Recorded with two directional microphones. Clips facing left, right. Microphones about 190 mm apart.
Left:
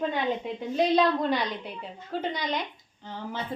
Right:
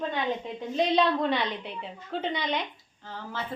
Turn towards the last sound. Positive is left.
turn(degrees=15)  # may be behind; listen again after turning